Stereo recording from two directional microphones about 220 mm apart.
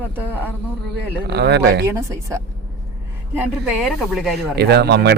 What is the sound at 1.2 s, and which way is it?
Speech, 50° right (ahead or behind).